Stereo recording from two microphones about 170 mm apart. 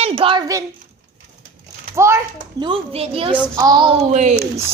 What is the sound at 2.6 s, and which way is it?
Speech, 30° right (ahead or behind).